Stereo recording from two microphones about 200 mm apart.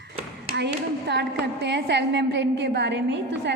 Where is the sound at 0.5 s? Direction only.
55° right (ahead or behind).